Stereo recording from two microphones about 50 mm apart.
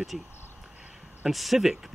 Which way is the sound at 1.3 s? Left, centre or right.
Centre.